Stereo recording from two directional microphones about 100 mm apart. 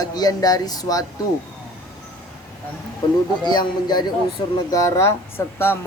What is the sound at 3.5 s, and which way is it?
Speech, 45° left (ahead or behind).